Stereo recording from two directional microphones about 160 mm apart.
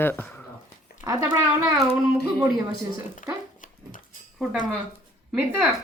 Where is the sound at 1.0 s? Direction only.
20° right (ahead or behind).